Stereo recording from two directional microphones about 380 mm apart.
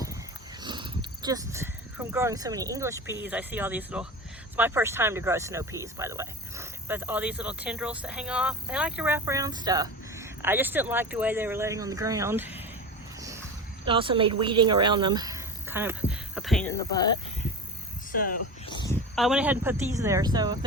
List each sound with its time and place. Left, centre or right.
0.6 s speech: centre
13.8 s speech: centre
18.2 s speech: centre
19.1 s speech: centre